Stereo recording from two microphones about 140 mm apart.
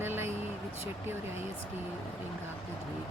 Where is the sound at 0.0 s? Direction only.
15° right (ahead or behind).